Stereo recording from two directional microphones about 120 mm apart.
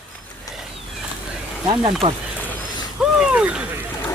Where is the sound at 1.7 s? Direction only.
45° right (ahead or behind).